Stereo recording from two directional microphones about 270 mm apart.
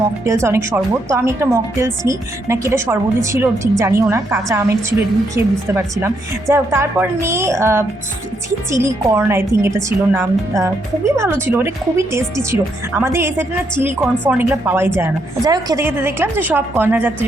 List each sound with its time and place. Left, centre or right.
0.3 s a woman's voice: centre